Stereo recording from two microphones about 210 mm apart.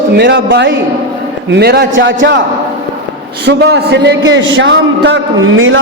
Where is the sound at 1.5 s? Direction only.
50° right (ahead or behind).